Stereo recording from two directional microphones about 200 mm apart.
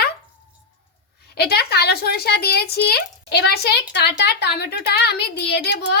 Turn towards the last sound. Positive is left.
turn(degrees=55)  # may be behind; listen again after turning